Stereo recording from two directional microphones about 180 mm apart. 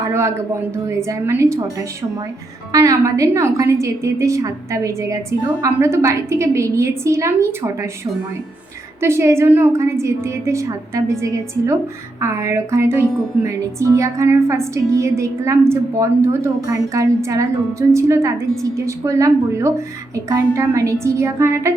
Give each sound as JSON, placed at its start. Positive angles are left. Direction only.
{"t": 0.0, "sound": "a man's voice", "side_deg": -15}
{"t": 2.7, "sound": "speech", "side_deg": -20}
{"t": 9.0, "sound": "speech", "side_deg": -15}